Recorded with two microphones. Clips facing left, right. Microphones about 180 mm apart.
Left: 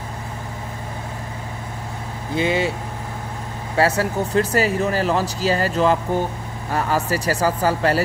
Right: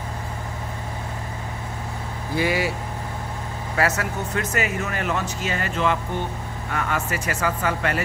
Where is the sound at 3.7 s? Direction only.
30° left (ahead or behind).